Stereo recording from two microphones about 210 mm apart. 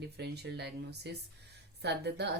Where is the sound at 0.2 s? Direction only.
50° right (ahead or behind).